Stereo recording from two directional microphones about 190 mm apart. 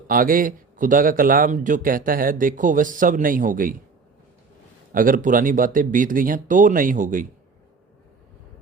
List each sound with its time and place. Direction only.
0.1 s a man's voice: 50° right (ahead or behind)
4.9 s a man's voice: 45° right (ahead or behind)